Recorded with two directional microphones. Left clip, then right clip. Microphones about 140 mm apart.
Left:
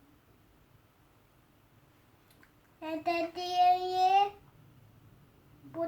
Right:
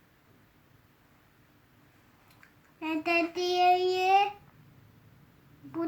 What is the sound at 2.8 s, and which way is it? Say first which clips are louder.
Child singing: right 4 dB; 5° left (ahead or behind).